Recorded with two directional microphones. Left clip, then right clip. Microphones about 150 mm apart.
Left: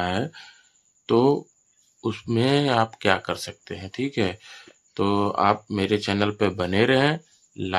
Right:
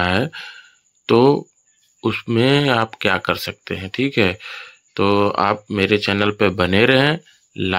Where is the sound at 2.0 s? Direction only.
25° right (ahead or behind).